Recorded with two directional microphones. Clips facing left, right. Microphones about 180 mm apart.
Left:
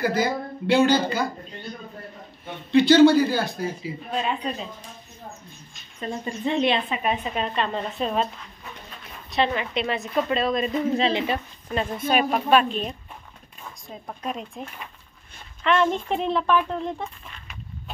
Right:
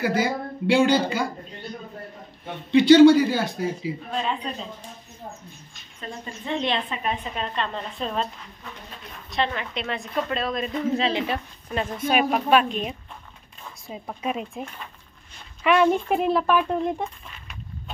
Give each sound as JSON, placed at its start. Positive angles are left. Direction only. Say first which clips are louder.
{"t": 0.0, "sound": "speech", "louder": "even", "side_deg": -10}
{"t": 2.8, "sound": "speech", "louder": "right 2 dB", "side_deg": -15}
{"t": 4.1, "sound": "speech", "louder": "left 4 dB", "side_deg": 10}
{"t": 5.9, "sound": "speech", "louder": "left 6 dB", "side_deg": 15}
{"t": 9.3, "sound": "a woman's voice", "louder": "left 3 dB", "side_deg": 5}